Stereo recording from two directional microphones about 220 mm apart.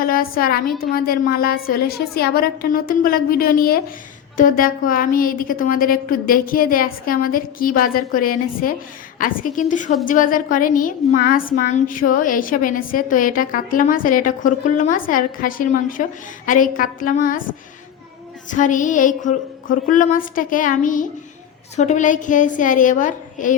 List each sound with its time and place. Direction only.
0.0 s a woman's voice: 40° left (ahead or behind)
18.5 s a woman's voice: 35° left (ahead or behind)